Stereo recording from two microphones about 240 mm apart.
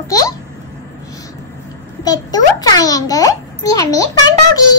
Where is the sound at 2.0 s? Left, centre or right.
Centre.